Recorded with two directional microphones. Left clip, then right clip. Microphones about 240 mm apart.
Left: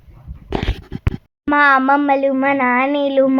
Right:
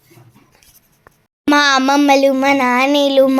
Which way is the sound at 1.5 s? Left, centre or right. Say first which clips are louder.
Even; right.